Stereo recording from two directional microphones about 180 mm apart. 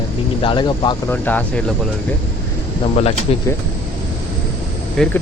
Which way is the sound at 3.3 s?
35° left (ahead or behind).